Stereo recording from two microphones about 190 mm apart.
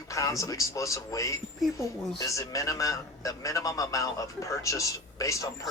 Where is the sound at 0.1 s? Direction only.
15° left (ahead or behind).